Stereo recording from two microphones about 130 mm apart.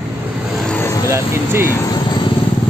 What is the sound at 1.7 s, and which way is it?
Speech, 20° left (ahead or behind).